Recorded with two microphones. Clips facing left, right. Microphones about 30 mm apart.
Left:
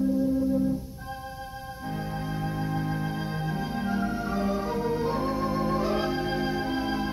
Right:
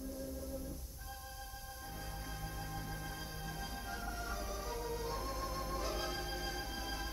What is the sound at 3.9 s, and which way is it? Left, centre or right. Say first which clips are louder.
Music: left 14 dB; left.